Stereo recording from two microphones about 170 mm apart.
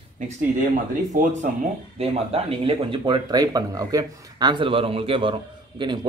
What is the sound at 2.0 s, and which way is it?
Speech, 35° right (ahead or behind).